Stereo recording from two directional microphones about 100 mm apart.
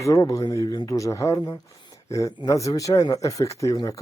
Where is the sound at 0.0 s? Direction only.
35° left (ahead or behind).